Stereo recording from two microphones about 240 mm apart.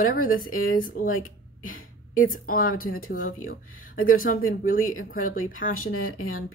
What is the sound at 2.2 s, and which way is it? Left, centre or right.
Speech, left.